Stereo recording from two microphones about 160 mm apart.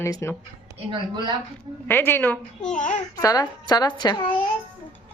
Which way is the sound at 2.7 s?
55° left (ahead or behind).